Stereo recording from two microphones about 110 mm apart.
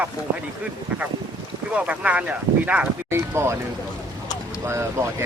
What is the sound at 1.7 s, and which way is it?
Speech, 10° right (ahead or behind).